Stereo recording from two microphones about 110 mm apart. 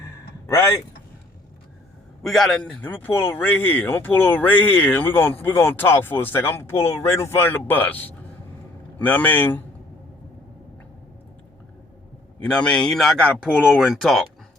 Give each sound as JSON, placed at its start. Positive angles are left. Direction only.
{"t": 2.2, "sound": "speech", "side_deg": 0}
{"t": 2.8, "sound": "speech", "side_deg": 20}
{"t": 12.4, "sound": "speech", "side_deg": 10}